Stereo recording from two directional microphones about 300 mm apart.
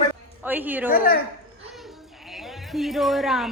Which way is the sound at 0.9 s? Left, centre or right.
Left.